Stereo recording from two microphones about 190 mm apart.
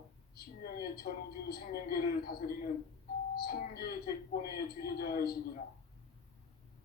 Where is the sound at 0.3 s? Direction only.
55° left (ahead or behind).